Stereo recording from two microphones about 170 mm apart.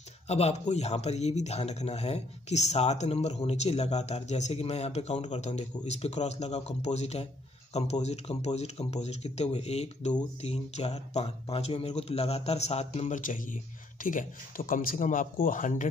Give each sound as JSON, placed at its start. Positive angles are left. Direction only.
{"t": 0.3, "sound": "speech", "side_deg": 40}